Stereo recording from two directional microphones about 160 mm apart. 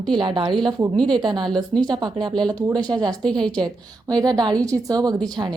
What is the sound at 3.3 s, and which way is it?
Speech, 5° left (ahead or behind).